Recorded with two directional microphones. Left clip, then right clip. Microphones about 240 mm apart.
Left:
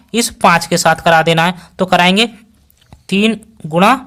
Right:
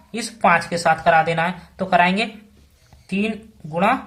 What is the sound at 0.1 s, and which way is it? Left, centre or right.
Speech, left.